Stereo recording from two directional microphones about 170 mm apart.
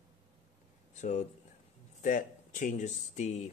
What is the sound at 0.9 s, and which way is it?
Speech, 45° left (ahead or behind).